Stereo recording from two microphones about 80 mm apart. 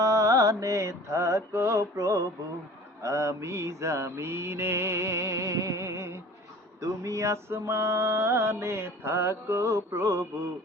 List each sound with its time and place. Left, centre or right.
0.0 s mantra: right
3.0 s music: right